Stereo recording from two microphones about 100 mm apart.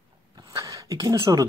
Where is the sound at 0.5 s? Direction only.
35° right (ahead or behind).